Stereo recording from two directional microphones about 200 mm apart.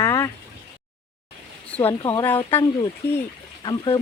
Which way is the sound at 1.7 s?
10° left (ahead or behind).